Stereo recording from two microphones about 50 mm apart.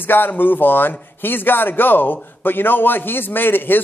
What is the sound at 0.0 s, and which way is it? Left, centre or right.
Speech, left.